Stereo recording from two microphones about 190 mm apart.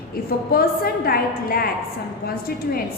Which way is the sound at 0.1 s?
50° left (ahead or behind).